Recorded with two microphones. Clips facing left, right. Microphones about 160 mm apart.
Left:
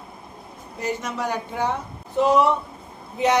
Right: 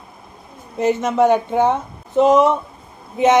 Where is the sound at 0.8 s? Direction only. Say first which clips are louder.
Right 11 dB; 25° right (ahead or behind).